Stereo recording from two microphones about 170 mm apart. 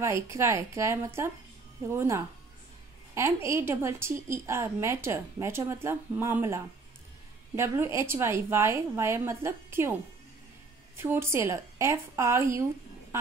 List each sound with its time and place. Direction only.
0.0 s a woman's voice: 15° right (ahead or behind)
11.0 s a woman's voice: 15° right (ahead or behind)